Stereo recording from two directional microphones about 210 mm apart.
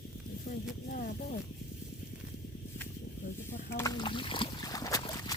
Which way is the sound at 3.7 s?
20° left (ahead or behind).